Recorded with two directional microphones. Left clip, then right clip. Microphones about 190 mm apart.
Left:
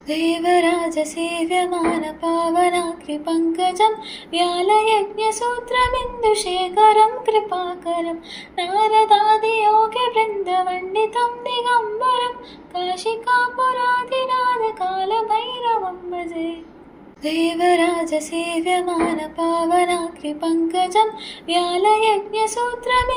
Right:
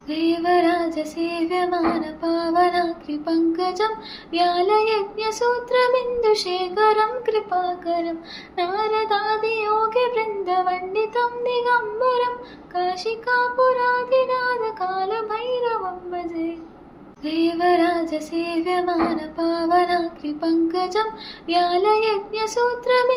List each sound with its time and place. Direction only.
0.1 s female singing: 10° left (ahead or behind); by 7.4 s 10° right (ahead or behind)
8.5 s child singing: 10° right (ahead or behind)
13.2 s child singing: 10° right (ahead or behind)
17.2 s female singing: 10° left (ahead or behind); by 23.0 s 10° right (ahead or behind)